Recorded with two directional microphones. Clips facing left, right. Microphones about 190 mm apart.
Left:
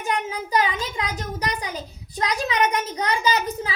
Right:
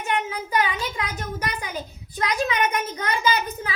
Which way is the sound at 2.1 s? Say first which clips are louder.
Even; 35° left (ahead or behind).